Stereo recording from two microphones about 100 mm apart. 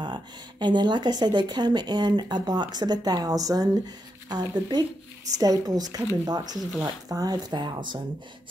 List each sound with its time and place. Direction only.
0.0 s a woman's voice: 50° right (ahead or behind)